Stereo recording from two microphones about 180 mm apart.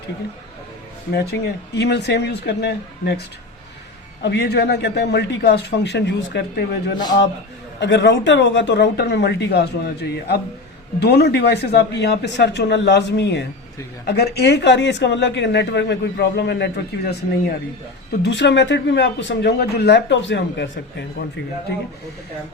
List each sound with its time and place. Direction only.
1.1 s speech: 65° left (ahead or behind)
18.2 s speech: 75° left (ahead or behind)